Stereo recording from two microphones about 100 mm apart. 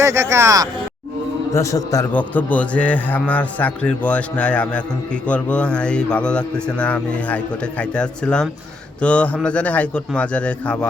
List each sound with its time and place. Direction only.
0.0 s speech: 25° right (ahead or behind)
1.5 s a man's voice: 35° left (ahead or behind)
2.1 s a man's voice: 15° left (ahead or behind)